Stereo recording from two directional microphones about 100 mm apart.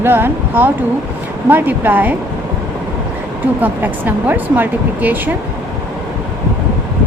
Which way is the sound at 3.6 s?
20° right (ahead or behind).